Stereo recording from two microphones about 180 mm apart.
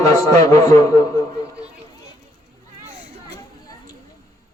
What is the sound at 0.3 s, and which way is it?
A man's voice, 20° left (ahead or behind).